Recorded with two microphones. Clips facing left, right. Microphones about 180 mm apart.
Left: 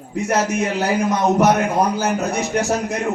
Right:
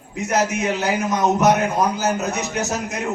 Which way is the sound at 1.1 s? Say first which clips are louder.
Even; 35° left (ahead or behind).